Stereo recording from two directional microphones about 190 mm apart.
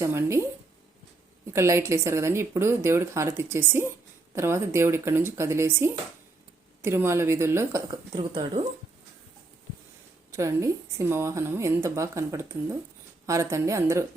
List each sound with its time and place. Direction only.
0.0 s a sound: 15° right (ahead or behind)
1.5 s speech: 15° right (ahead or behind)
10.3 s speech: 15° right (ahead or behind)